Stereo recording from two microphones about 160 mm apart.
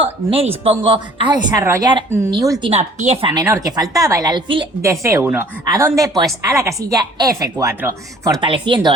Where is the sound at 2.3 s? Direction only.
30° right (ahead or behind).